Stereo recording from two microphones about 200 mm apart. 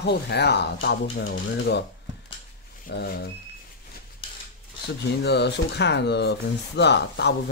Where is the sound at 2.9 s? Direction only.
60° left (ahead or behind).